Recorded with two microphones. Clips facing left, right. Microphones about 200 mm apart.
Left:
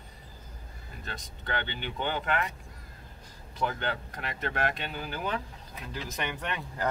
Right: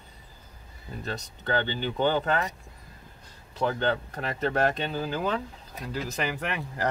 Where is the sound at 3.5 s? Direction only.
35° right (ahead or behind).